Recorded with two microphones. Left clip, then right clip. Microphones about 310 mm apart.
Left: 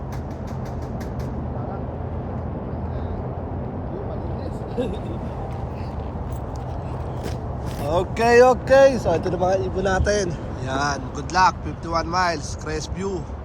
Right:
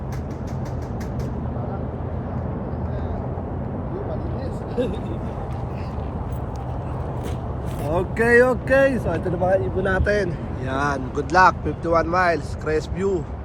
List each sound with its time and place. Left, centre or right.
4.8 s speech: centre
7.9 s speech: centre